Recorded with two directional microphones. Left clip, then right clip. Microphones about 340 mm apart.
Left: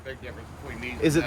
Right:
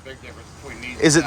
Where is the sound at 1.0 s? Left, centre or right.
Centre.